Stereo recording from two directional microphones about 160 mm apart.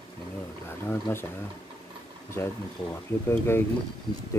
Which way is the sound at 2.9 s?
15° left (ahead or behind).